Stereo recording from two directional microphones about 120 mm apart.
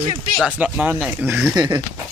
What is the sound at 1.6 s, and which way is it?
Speech, 35° right (ahead or behind).